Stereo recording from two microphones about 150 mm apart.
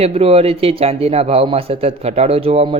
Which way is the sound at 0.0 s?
40° right (ahead or behind).